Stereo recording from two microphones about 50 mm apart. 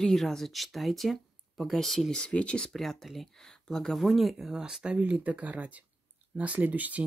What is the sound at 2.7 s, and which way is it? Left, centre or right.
Speech, centre.